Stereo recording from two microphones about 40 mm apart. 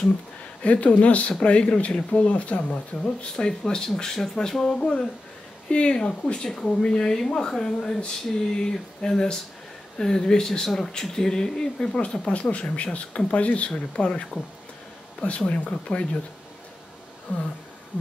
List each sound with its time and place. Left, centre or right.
0.6 s speech: left
2.2 s speech: left
3.3 s speech: centre
12.0 s speech: left
15.2 s speech: left
17.3 s speech: left